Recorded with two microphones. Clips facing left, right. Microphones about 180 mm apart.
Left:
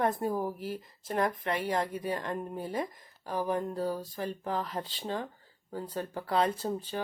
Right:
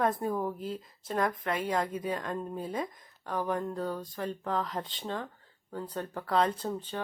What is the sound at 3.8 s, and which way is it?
Speech, 5° left (ahead or behind).